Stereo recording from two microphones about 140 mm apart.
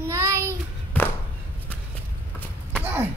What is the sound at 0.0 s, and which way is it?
Child singing, 20° right (ahead or behind).